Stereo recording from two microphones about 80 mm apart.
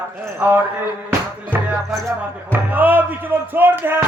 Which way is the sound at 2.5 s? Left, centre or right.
Right.